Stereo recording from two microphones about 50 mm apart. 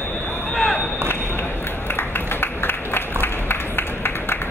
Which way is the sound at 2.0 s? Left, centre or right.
Left.